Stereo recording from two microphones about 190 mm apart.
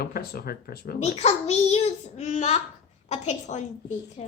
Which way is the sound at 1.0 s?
35° left (ahead or behind).